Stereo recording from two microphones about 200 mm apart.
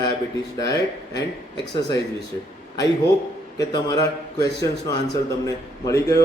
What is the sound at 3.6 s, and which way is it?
Speech, 20° left (ahead or behind).